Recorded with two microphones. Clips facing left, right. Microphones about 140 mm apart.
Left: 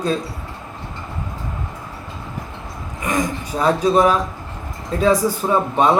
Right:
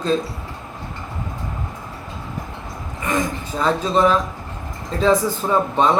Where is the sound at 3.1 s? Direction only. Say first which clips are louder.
Left 1 dB; 15° left (ahead or behind).